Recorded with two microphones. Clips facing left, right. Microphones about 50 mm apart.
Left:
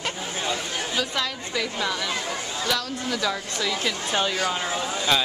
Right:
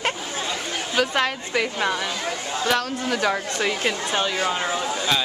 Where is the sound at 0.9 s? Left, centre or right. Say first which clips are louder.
Right 8 dB; right.